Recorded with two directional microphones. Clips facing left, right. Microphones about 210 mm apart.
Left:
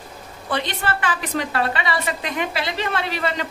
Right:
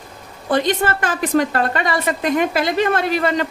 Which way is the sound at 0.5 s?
45° right (ahead or behind).